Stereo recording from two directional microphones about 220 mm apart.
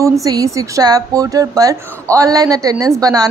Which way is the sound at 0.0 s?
15° right (ahead or behind).